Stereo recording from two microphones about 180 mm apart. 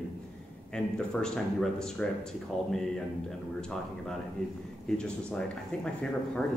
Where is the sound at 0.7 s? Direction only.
5° left (ahead or behind).